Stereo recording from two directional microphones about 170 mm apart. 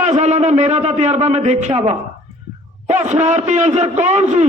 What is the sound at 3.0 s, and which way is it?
A man's voice, 45° right (ahead or behind).